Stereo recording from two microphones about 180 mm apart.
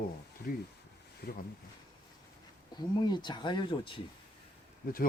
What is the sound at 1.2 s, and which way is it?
Speech, 60° left (ahead or behind).